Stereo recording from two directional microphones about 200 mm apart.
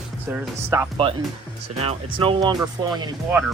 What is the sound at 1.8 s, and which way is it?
Speech, 30° right (ahead or behind).